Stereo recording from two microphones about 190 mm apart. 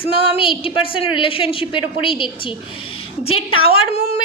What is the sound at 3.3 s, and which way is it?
Speech, 90° left.